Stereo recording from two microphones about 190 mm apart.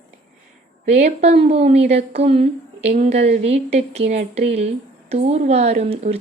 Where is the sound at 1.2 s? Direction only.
35° right (ahead or behind).